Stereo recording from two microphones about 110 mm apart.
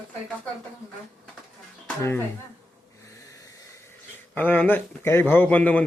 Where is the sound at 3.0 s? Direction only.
30° left (ahead or behind).